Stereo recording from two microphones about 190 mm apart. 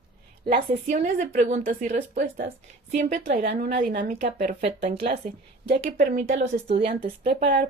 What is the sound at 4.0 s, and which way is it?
A woman's voice, 40° right (ahead or behind).